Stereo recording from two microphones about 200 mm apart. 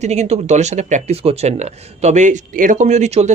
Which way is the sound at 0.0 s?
35° right (ahead or behind).